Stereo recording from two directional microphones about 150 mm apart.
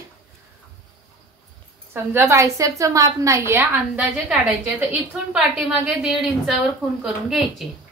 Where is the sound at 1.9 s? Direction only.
15° right (ahead or behind).